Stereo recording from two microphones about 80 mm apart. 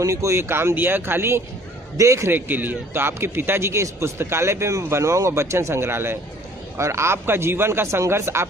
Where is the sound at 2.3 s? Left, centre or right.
Right.